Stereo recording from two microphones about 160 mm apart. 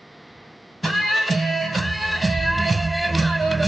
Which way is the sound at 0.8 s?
Centre (ahead or behind).